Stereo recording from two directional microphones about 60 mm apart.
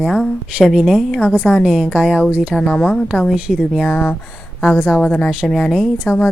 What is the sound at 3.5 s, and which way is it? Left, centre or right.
Speech, centre.